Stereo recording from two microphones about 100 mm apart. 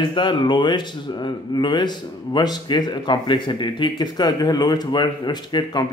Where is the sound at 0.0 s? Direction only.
55° left (ahead or behind).